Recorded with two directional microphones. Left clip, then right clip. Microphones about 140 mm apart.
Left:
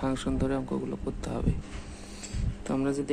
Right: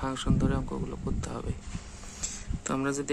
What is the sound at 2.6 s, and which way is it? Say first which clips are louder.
Speech: left 1 dB; 25° right (ahead or behind).